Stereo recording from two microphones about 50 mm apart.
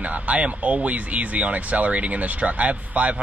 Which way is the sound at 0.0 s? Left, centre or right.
Right.